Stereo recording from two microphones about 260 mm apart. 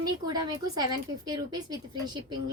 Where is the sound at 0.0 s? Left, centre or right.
Centre.